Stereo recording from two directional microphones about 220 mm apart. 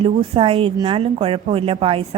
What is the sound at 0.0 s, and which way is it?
A woman's voice, 25° right (ahead or behind).